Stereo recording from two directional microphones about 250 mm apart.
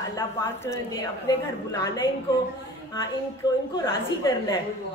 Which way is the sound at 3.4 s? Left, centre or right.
Centre.